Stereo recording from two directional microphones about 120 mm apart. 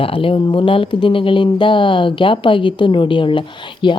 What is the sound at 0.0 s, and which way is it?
Speech, 50° left (ahead or behind).